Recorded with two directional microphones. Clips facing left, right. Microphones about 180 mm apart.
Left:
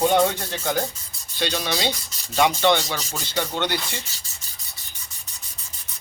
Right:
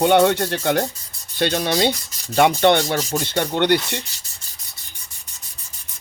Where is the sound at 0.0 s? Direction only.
70° right (ahead or behind).